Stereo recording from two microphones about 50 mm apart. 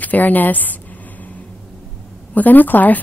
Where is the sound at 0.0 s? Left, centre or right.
Left.